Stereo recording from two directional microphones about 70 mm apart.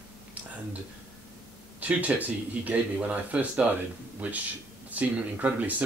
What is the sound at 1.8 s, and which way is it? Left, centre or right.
Speech, centre.